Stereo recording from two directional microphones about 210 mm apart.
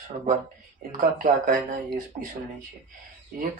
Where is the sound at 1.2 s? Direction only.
40° right (ahead or behind).